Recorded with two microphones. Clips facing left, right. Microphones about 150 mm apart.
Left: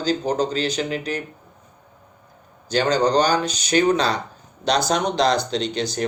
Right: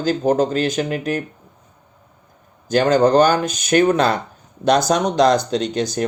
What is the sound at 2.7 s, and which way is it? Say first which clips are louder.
Speech: right 5 dB; 50° right (ahead or behind).